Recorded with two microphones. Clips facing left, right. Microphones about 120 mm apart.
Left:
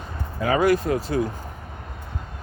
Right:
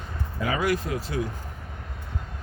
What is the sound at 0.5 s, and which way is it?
Speech, 45° left (ahead or behind).